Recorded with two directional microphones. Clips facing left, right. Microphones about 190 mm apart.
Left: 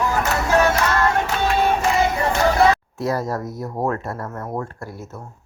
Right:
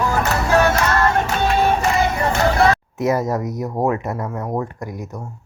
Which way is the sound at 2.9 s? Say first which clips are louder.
Right 4 dB; 20° right (ahead or behind).